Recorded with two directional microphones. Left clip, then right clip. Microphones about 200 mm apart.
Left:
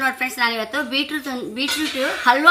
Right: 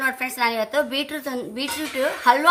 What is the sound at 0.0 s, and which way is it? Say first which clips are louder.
A woman's voice: left 2 dB; 50° right (ahead or behind).